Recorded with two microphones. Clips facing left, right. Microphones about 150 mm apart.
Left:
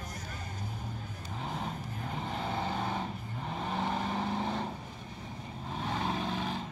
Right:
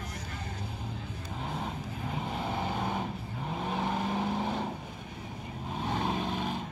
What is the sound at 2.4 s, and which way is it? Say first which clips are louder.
Vehicle: right 1 dB; 10° right (ahead or behind).